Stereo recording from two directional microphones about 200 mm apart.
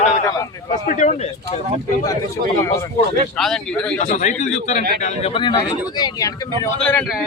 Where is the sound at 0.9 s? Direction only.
35° left (ahead or behind).